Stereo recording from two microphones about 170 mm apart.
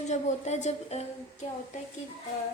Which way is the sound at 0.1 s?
40° left (ahead or behind).